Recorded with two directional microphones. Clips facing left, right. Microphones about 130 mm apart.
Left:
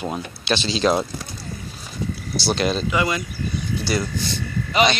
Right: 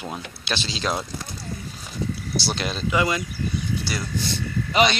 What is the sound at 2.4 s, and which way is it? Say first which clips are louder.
Speech: left 10 dB; 20° left (ahead or behind).